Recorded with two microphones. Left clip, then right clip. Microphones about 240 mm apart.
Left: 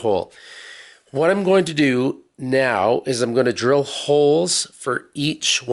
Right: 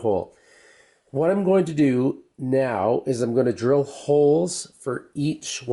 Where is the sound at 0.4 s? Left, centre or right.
Centre.